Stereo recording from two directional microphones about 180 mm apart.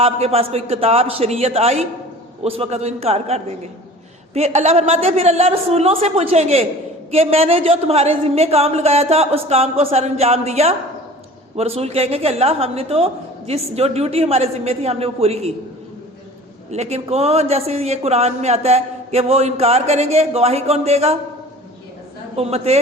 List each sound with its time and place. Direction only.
0.0 s speech: 35° right (ahead or behind)
16.7 s speech: 35° right (ahead or behind)
22.4 s speech: 35° right (ahead or behind)